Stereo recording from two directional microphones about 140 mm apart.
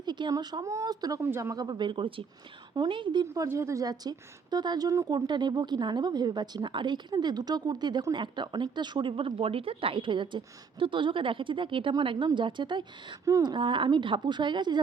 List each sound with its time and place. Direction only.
0.0 s a woman's voice: 30° right (ahead or behind)
3.2 s a woman's voice: 20° right (ahead or behind)